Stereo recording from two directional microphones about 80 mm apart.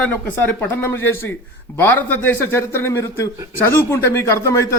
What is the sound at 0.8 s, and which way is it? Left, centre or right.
Speech, left.